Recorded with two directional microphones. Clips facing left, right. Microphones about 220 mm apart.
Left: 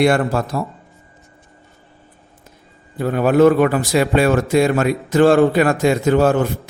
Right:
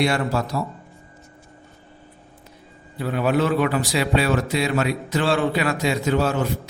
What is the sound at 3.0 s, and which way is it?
A man's voice, 45° left (ahead or behind).